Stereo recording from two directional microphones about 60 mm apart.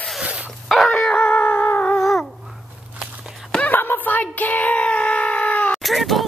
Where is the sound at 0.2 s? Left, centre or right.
Centre.